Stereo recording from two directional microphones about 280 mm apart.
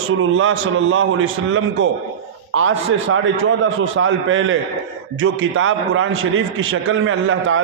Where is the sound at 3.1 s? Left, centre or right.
Right.